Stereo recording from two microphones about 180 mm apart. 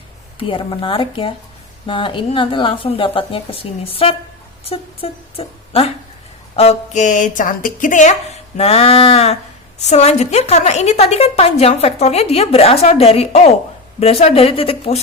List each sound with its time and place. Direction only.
0.3 s a woman's voice: 30° left (ahead or behind); by 8.1 s 45° left (ahead or behind)
8.5 s a woman's voice: 35° left (ahead or behind)